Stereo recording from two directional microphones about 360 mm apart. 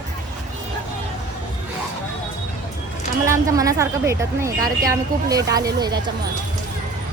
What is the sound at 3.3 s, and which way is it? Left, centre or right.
A woman's voice, centre.